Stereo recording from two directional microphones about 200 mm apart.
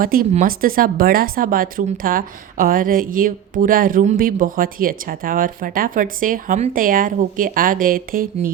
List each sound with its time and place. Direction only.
0.0 s speech: 45° right (ahead or behind)